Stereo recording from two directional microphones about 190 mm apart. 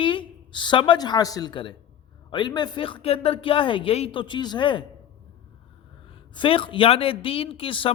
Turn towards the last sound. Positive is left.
turn(degrees=30)  # may be behind; listen again after turning